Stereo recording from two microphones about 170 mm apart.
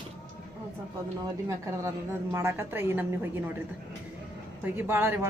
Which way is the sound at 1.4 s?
15° right (ahead or behind).